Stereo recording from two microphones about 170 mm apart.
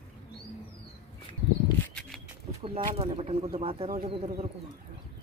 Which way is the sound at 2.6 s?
35° right (ahead or behind).